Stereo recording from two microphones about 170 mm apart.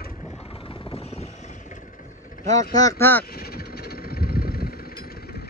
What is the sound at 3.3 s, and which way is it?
Vehicle, 65° left (ahead or behind).